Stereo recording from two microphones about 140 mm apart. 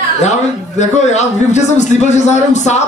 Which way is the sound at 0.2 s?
55° left (ahead or behind).